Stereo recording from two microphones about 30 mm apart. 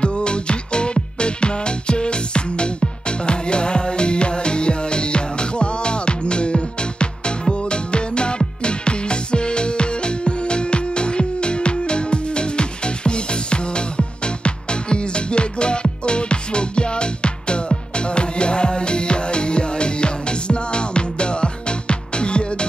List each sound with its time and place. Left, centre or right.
0.0 s music: left